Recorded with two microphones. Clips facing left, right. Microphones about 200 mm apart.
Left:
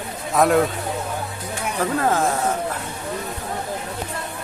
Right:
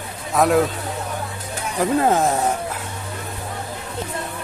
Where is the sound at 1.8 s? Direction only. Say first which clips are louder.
Right 3 dB; 20° right (ahead or behind).